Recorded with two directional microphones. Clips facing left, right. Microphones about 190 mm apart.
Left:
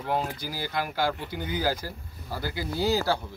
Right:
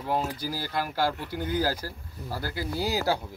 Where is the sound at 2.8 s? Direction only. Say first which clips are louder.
Left 2 dB; 10° right (ahead or behind).